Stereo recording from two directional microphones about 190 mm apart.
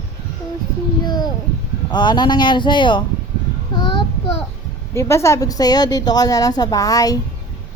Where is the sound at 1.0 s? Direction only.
20° left (ahead or behind).